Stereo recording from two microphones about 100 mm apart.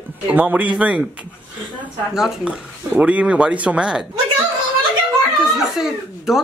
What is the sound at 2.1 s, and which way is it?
Speech, 5° right (ahead or behind).